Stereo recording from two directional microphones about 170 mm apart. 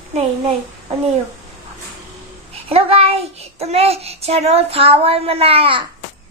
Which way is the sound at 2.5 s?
35° right (ahead or behind).